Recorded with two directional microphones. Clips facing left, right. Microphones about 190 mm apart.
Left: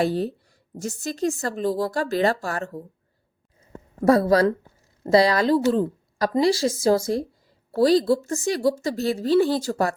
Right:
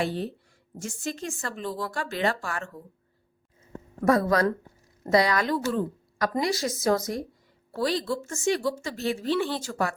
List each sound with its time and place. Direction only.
0.0 s speech: 40° left (ahead or behind)
4.0 s a woman's voice: 30° left (ahead or behind)